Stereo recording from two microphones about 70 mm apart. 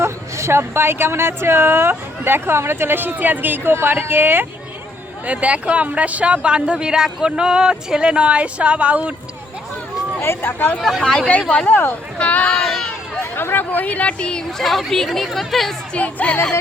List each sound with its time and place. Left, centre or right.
0.0 s speech: right
5.2 s a man's voice: centre
10.2 s speech: left
10.8 s speech: centre
11.3 s speech: centre
12.5 s a sound: centre
13.3 s speech: left; by 15.7 s centre
16.0 s speech: left